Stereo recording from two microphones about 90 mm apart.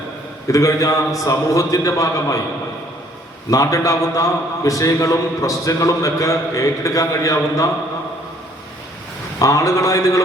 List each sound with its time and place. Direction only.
0.4 s a man's voice: 35° left (ahead or behind)
3.5 s a man's voice: 40° left (ahead or behind)
9.4 s a man's voice: 35° left (ahead or behind)